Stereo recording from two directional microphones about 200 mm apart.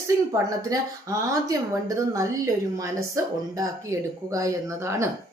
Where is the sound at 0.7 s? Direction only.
15° right (ahead or behind).